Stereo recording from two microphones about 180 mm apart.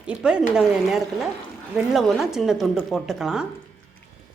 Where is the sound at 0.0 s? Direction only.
5° right (ahead or behind).